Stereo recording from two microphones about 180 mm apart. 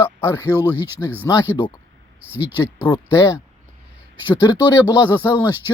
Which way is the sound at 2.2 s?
10° right (ahead or behind).